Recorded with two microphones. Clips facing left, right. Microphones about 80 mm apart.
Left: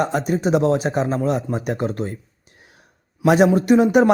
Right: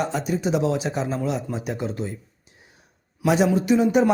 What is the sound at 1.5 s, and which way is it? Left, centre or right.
Speech, left.